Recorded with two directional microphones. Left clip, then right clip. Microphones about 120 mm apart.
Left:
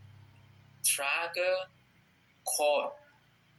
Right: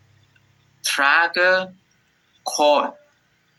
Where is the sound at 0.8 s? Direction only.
90° right.